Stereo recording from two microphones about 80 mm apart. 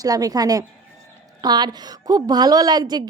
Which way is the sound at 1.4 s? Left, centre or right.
Right.